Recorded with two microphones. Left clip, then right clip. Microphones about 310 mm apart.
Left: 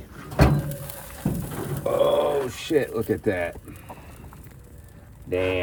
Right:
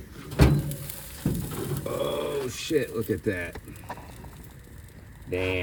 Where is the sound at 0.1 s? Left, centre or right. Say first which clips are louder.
Left 3 dB; centre.